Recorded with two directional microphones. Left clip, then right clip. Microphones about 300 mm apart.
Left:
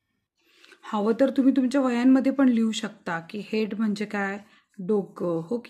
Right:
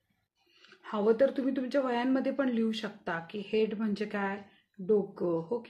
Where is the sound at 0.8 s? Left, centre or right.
Left.